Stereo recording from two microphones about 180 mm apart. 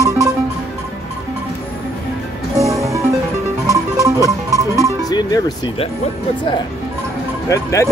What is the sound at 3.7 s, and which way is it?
Music, 20° right (ahead or behind).